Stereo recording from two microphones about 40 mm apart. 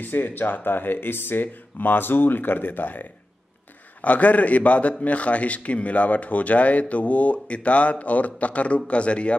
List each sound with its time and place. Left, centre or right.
0.0 s speech: left
4.0 s speech: left